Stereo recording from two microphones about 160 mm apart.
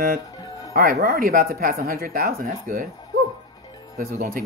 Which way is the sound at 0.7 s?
70° right (ahead or behind).